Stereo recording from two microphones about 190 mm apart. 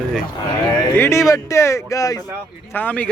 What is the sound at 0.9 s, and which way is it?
Speech, 15° left (ahead or behind).